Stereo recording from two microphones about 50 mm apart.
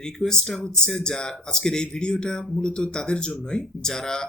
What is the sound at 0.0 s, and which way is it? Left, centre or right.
Speech, centre.